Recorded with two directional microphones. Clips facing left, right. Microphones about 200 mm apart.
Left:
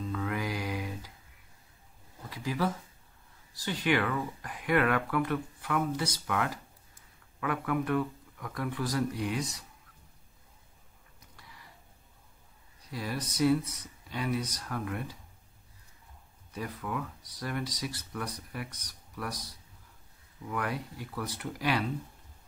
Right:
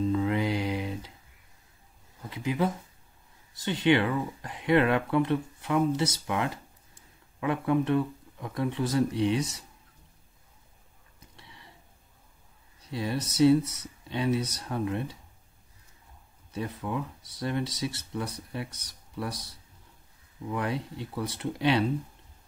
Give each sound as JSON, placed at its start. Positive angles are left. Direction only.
{"t": 0.1, "sound": "music", "side_deg": -25}
{"t": 2.2, "sound": "a sound", "side_deg": -20}
{"t": 3.5, "sound": "speech", "side_deg": -25}
{"t": 11.3, "sound": "a sound", "side_deg": -25}
{"t": 12.9, "sound": "speech", "side_deg": -25}
{"t": 16.5, "sound": "speech", "side_deg": -25}
{"t": 20.4, "sound": "speech", "side_deg": -25}